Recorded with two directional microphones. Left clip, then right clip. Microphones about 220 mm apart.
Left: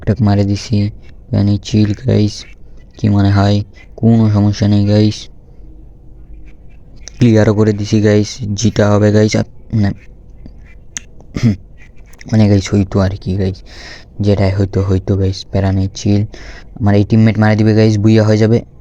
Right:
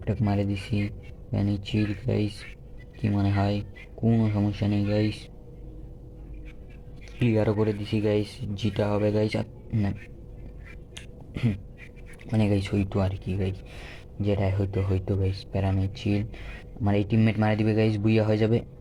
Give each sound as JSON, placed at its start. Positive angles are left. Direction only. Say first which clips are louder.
{"t": 0.0, "sound": "speech", "louder": "left 13 dB", "side_deg": 45}
{"t": 7.2, "sound": "speech", "louder": "left 13 dB", "side_deg": 45}
{"t": 10.9, "sound": "finger snapping", "louder": "left 15 dB", "side_deg": 45}
{"t": 12.2, "sound": "speech", "louder": "left 13 dB", "side_deg": 45}